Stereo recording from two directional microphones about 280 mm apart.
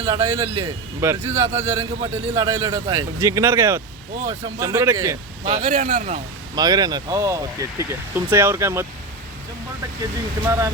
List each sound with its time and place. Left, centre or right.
0.0 s speech: centre
5.5 s speech: right
6.6 s speech: centre
10.0 s speech: centre